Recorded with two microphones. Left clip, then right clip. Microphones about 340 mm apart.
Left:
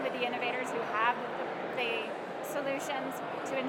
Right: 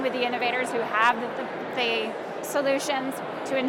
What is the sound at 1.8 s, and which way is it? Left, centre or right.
Speech, right.